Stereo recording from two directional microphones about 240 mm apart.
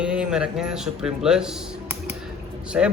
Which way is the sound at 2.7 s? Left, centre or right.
Centre.